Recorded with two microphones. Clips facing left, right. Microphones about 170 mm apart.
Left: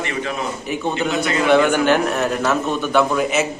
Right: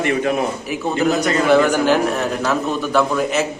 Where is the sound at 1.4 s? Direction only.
Centre (ahead or behind).